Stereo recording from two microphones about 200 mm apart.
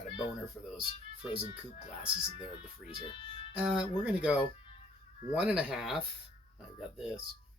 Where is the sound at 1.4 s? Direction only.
30° left (ahead or behind).